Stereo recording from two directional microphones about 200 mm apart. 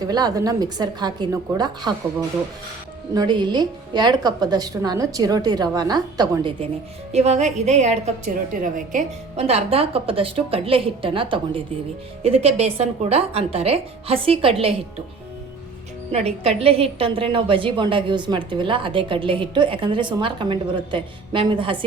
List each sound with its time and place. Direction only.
0.1 s a woman's voice: 20° right (ahead or behind)
3.2 s a woman's voice: 20° right (ahead or behind)
7.1 s a woman's voice: 35° right (ahead or behind)
16.1 s a woman's voice: 30° right (ahead or behind)